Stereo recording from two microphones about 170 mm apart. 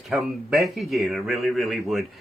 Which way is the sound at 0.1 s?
Centre (ahead or behind).